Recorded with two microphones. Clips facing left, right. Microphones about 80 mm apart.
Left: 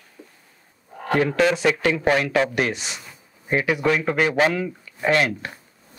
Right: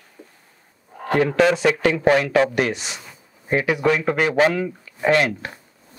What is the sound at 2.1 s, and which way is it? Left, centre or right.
Speech, right.